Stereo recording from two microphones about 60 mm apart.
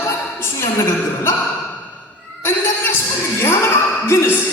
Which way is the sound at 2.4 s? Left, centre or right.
Left.